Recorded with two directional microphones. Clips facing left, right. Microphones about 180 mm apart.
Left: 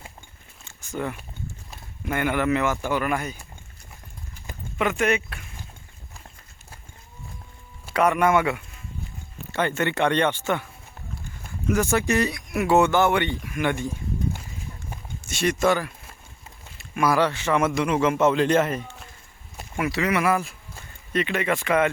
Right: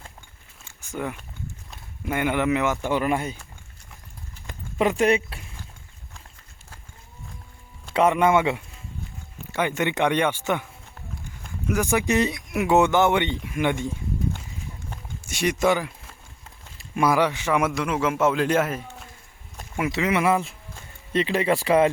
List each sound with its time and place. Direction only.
0.6 s a sound: 10° right (ahead or behind)
2.0 s speech: 15° right (ahead or behind)
4.8 s speech: 30° right (ahead or behind)
7.9 s speech: 20° right (ahead or behind)
9.5 s speech: 10° right (ahead or behind)
11.7 s speech: 15° right (ahead or behind)
15.3 s speech: 15° right (ahead or behind)
16.7 s a sound: 25° right (ahead or behind)
17.2 s a man's voice: 15° right (ahead or behind)
19.7 s speech: 20° right (ahead or behind)